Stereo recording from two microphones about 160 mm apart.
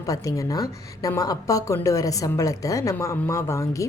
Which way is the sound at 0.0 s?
20° left (ahead or behind).